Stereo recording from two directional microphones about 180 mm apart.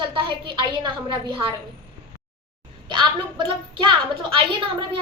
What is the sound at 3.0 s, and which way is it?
A woman's voice, 25° right (ahead or behind).